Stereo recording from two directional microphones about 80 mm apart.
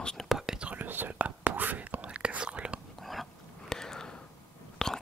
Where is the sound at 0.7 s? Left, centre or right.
Right.